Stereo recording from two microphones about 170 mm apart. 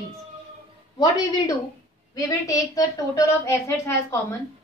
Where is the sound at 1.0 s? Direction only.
20° left (ahead or behind).